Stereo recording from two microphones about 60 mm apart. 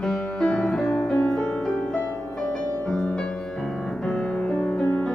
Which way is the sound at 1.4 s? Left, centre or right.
Left.